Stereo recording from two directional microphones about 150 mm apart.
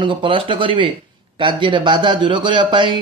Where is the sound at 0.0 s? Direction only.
35° right (ahead or behind).